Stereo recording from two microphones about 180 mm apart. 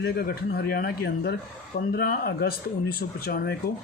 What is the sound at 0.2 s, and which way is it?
Speech, 55° left (ahead or behind).